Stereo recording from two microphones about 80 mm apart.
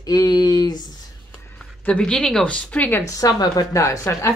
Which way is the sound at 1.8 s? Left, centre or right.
Centre.